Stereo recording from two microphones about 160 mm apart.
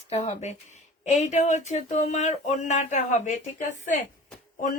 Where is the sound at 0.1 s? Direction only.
45° left (ahead or behind).